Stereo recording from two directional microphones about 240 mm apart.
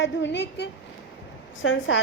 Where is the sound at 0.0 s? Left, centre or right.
Left.